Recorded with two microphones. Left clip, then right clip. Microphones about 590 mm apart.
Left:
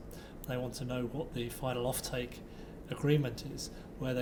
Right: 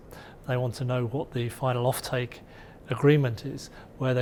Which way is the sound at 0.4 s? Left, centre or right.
Right.